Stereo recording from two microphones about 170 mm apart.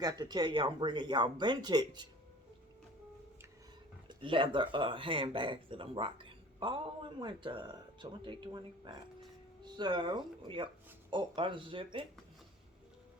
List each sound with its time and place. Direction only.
0.0 s speech: 25° right (ahead or behind)
4.1 s speech: 30° right (ahead or behind)